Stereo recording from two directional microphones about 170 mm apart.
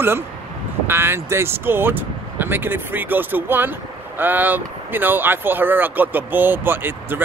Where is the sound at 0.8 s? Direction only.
15° right (ahead or behind).